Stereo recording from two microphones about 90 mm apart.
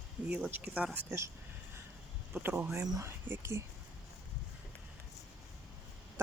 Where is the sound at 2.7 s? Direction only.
35° right (ahead or behind).